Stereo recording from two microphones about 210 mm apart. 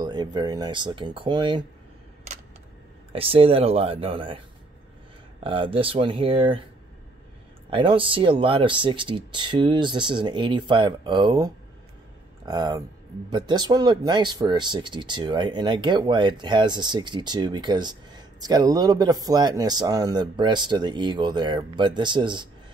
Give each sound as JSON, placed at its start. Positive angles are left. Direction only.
{"t": 0.0, "sound": "speech", "side_deg": -20}
{"t": 3.1, "sound": "speech", "side_deg": -25}
{"t": 5.4, "sound": "speech", "side_deg": -25}
{"t": 7.7, "sound": "speech", "side_deg": -25}